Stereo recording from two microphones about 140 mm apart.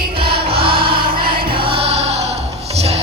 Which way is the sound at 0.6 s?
40° right (ahead or behind).